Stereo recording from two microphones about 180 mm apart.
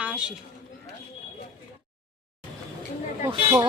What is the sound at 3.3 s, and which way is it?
Speech, 25° right (ahead or behind).